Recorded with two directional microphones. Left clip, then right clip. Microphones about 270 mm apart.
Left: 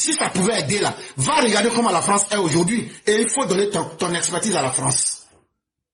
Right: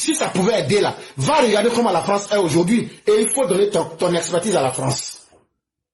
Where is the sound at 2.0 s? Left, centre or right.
Left.